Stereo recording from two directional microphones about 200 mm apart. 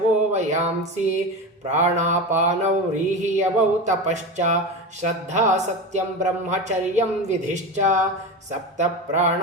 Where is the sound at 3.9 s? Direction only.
35° right (ahead or behind).